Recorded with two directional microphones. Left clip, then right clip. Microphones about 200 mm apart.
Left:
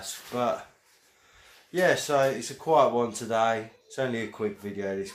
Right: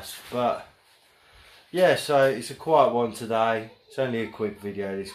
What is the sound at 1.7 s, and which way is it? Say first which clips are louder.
Speech: right 3 dB; 5° right (ahead or behind).